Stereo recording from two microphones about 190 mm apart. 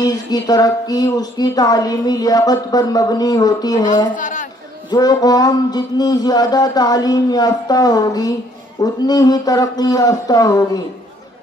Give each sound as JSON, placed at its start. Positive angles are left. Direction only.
{"t": 0.0, "sound": "speech", "side_deg": 20}
{"t": 4.2, "sound": "a man's voice", "side_deg": 40}
{"t": 4.9, "sound": "speech", "side_deg": 20}